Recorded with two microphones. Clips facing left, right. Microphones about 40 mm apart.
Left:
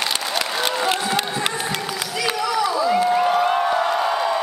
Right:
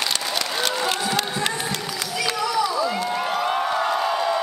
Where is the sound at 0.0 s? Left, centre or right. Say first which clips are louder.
Left 2 dB; centre.